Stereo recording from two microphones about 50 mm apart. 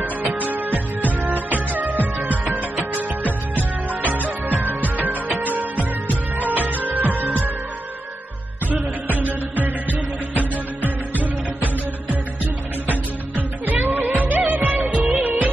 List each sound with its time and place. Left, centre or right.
0.3 s music: right
4.5 s music: right
8.6 s music: right
13.7 s music: right
14.3 s music of bollywood: right
15.1 s music: right